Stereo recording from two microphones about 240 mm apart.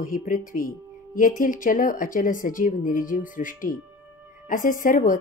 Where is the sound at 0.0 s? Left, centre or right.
Left.